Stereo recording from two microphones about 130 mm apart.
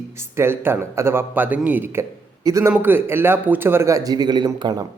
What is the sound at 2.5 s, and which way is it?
Speech, 25° right (ahead or behind).